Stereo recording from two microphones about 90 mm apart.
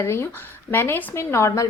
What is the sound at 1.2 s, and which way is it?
Speech, 35° left (ahead or behind).